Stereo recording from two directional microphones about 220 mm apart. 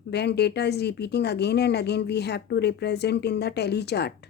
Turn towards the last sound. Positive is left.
turn(degrees=50)  # may be behind; listen again after turning